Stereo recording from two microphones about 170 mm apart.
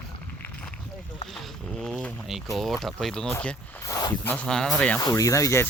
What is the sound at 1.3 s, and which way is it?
Speech, centre (ahead or behind).